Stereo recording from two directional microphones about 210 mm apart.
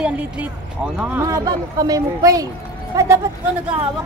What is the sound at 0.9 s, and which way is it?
Speech, 10° right (ahead or behind).